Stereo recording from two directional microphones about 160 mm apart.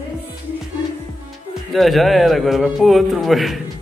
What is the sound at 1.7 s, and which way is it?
Speech, centre (ahead or behind).